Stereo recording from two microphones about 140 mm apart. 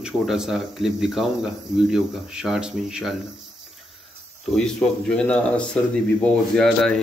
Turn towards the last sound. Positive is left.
turn(degrees=5)  # may be behind; listen again after turning